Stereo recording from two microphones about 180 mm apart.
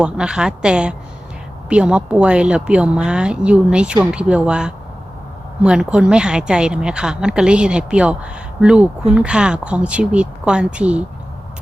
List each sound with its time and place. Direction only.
0.0 s speech: 5° right (ahead or behind)